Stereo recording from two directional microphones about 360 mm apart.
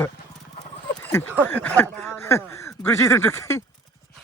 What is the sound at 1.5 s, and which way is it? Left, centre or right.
Speech, centre.